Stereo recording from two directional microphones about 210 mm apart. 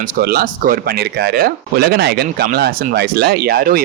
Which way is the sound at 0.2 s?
45° right (ahead or behind).